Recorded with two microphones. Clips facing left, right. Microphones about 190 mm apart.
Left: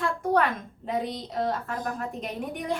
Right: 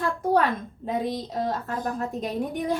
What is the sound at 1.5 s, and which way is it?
Speech, 30° right (ahead or behind).